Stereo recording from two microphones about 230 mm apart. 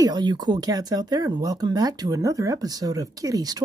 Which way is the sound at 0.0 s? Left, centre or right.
Centre.